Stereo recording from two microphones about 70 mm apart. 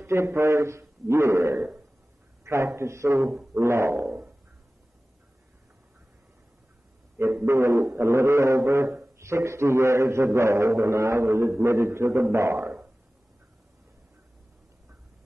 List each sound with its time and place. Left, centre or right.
0.0 s a man's voice: right
4.0 s a sound: right
7.4 s a man's voice: right